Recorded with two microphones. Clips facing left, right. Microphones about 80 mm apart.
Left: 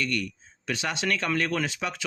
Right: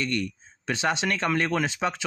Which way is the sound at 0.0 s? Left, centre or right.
Right.